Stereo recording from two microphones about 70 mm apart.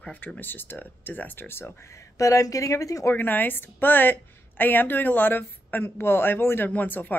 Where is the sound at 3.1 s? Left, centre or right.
Left.